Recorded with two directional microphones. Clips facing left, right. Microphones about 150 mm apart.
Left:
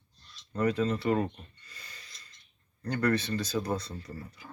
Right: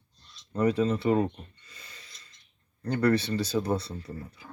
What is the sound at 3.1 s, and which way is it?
Speech, 30° right (ahead or behind).